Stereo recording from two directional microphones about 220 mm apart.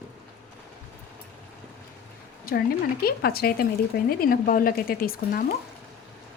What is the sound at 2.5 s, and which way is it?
Speech, 45° left (ahead or behind).